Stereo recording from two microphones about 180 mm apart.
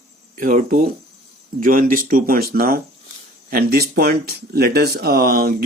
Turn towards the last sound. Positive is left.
turn(degrees=-60)  # may be behind; listen again after turning